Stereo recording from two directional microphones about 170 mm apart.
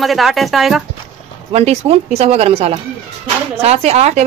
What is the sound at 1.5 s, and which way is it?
A woman's voice, 35° right (ahead or behind).